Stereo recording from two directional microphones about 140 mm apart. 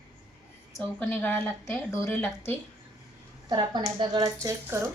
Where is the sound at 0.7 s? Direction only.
15° left (ahead or behind).